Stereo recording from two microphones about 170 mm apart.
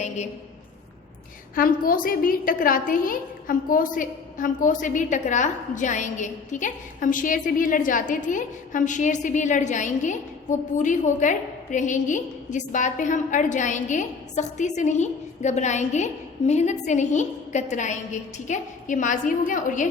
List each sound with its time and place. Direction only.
1.5 s a woman's voice: 55° left (ahead or behind)